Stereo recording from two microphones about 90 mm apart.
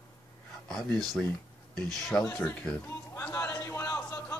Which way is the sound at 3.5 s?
35° left (ahead or behind).